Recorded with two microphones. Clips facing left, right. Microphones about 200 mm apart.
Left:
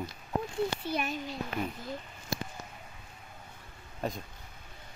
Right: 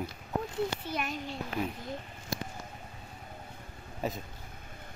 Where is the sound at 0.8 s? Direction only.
30° left (ahead or behind).